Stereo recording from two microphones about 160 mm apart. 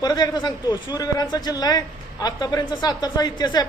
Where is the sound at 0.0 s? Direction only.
25° left (ahead or behind).